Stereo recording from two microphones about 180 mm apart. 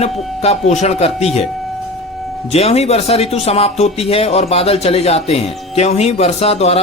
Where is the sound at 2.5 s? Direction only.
35° left (ahead or behind).